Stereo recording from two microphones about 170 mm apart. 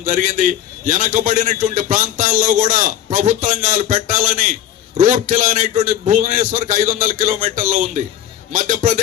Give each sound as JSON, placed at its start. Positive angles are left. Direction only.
{"t": 0.0, "sound": "a man's voice", "side_deg": -50}